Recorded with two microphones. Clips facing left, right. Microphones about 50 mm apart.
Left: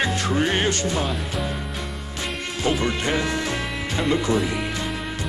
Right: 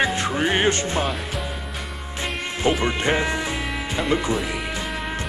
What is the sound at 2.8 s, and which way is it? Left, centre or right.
Speech, right.